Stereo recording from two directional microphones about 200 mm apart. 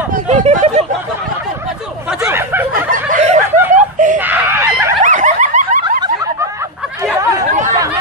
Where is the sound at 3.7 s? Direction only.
40° right (ahead or behind).